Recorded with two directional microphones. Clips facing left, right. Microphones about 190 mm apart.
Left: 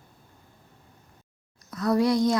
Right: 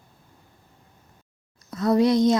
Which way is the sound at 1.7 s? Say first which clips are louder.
Right 3 dB; 25° right (ahead or behind).